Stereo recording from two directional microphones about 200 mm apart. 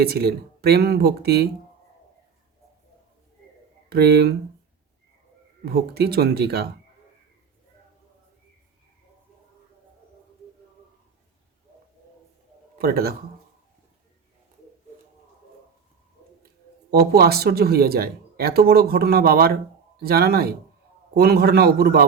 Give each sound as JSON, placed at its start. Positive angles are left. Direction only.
{"t": 0.0, "sound": "speech", "side_deg": -50}
{"t": 3.9, "sound": "speech", "side_deg": -55}
{"t": 5.6, "sound": "speech", "side_deg": -50}
{"t": 12.8, "sound": "speech", "side_deg": -50}
{"t": 16.9, "sound": "speech", "side_deg": -50}